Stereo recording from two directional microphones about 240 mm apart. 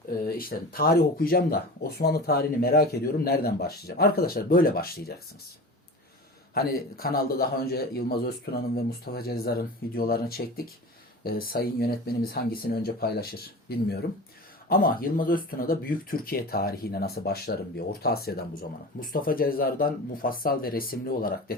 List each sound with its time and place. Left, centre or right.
0.3 s speech: left
6.5 s speech: left